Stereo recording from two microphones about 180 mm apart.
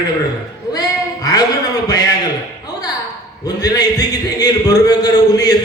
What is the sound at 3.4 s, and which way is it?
A man's voice, 20° left (ahead or behind).